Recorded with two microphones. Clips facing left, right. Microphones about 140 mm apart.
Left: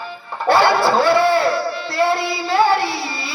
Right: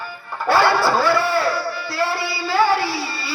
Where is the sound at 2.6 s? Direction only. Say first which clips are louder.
Left 1 dB; 65° left (ahead or behind).